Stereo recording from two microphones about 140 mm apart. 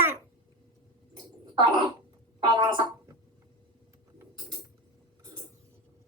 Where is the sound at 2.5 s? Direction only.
35° right (ahead or behind).